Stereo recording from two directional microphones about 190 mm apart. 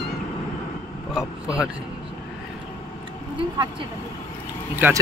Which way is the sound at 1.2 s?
5° right (ahead or behind).